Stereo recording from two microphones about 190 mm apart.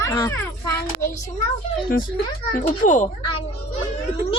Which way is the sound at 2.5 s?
40° left (ahead or behind).